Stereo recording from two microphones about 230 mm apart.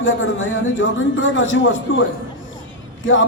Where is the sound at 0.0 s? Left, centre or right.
Left.